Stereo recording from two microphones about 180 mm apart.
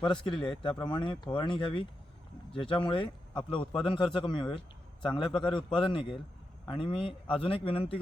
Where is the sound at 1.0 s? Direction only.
25° left (ahead or behind).